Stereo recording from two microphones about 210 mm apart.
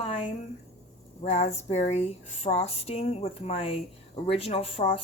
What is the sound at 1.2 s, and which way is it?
Speech, 30° left (ahead or behind).